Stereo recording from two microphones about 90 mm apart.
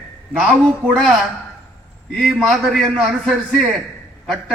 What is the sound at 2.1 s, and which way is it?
Speech, centre (ahead or behind).